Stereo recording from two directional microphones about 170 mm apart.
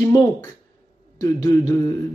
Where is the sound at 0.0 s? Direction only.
20° left (ahead or behind).